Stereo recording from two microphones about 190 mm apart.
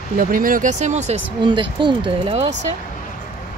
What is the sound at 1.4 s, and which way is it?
Speech, 25° right (ahead or behind).